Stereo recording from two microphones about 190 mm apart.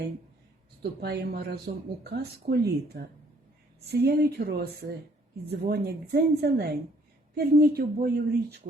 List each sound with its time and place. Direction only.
0.8 s a woman's voice: 60° right (ahead or behind)